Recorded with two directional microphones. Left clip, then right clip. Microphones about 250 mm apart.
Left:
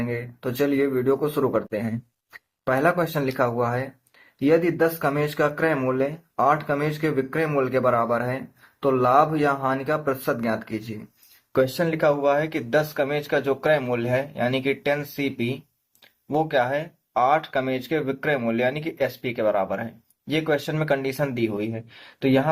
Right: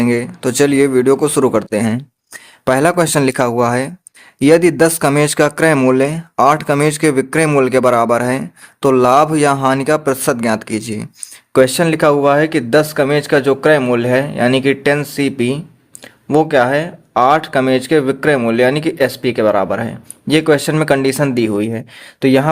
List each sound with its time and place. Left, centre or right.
0.0 s speech: right